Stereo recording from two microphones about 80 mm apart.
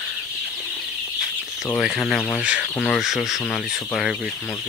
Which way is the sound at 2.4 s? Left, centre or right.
Centre.